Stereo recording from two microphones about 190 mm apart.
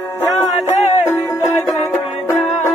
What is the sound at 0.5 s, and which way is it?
Music, 35° left (ahead or behind).